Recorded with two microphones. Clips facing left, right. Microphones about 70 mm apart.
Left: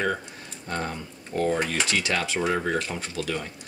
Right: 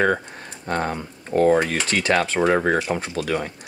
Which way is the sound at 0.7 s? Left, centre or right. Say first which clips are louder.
Right 6 dB; right.